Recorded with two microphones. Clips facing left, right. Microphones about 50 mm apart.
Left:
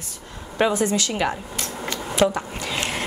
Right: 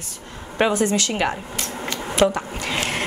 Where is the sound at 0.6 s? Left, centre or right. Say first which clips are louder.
Right 1 dB; right.